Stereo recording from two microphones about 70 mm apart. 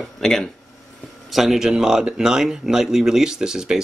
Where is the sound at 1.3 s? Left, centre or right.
Centre.